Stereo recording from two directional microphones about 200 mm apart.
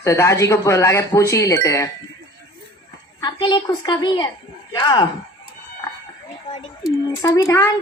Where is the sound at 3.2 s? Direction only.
20° left (ahead or behind).